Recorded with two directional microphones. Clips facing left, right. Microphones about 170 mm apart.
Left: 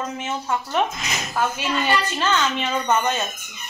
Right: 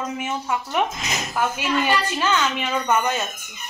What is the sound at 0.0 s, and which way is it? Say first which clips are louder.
A woman's voice: right 1 dB; 10° right (ahead or behind).